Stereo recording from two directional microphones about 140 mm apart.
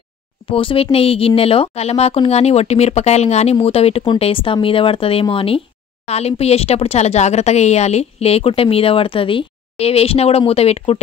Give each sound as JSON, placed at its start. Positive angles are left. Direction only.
{"t": 0.5, "sound": "speech", "side_deg": 40}